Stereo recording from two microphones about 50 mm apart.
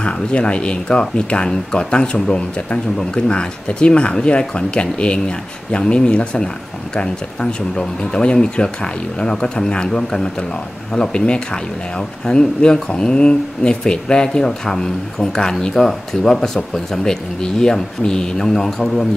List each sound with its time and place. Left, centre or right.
0.0 s speech: left
7.7 s speech: centre